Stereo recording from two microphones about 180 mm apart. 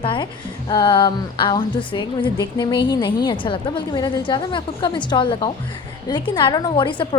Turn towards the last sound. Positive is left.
turn(degrees=25)  # may be behind; listen again after turning